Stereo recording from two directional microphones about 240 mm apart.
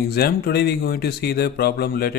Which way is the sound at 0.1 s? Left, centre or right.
Left.